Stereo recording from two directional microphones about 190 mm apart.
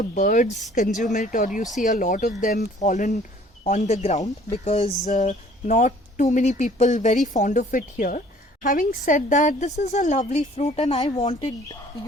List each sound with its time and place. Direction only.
0.0 s a woman's voice: 45° left (ahead or behind)